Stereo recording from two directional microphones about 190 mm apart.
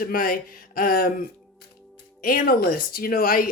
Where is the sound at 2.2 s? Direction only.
50° left (ahead or behind).